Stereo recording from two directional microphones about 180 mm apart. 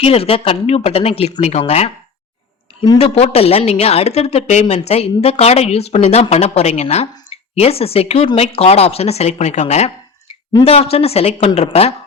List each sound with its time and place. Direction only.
0.0 s a woman's voice: 30° left (ahead or behind)
3.0 s a woman's voice: 35° left (ahead or behind)